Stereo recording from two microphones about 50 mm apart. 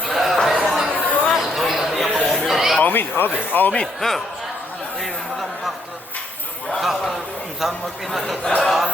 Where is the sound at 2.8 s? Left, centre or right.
Left.